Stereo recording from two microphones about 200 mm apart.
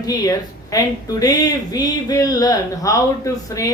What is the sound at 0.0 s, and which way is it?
A woman's voice, 20° left (ahead or behind).